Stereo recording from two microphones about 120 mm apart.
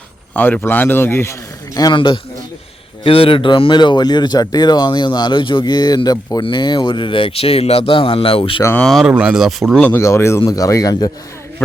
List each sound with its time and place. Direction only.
0.3 s speech: 15° left (ahead or behind); by 2.0 s 30° left (ahead or behind)
3.0 s speech: 50° left (ahead or behind)
8.8 s speech: centre (ahead or behind)
9.8 s speech: 20° left (ahead or behind)